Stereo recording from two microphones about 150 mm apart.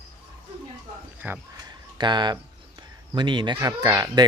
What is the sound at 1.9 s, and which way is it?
Speech, 30° right (ahead or behind).